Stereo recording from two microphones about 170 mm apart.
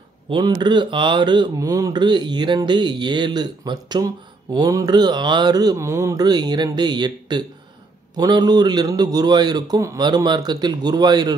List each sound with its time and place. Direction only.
0.3 s speech: 25° right (ahead or behind)